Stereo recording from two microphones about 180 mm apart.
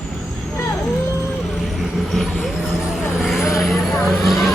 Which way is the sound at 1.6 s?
Centre (ahead or behind).